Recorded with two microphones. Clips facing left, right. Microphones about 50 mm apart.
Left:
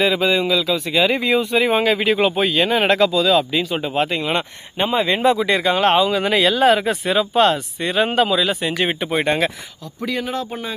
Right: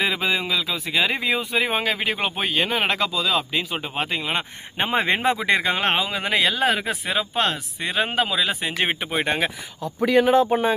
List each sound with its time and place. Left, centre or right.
0.0 s speech: centre
4.9 s speech: right